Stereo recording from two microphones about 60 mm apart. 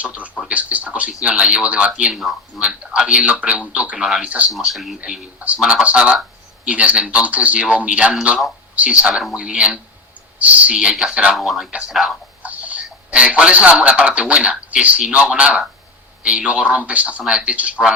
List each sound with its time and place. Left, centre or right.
0.0 s a man's voice: right
2.0 s speech: centre
2.6 s a sound: centre
3.1 s a man's voice: centre
4.3 s a man's voice: right
4.5 s a man's voice: centre
11.3 s speech: centre
12.4 s a man's voice: right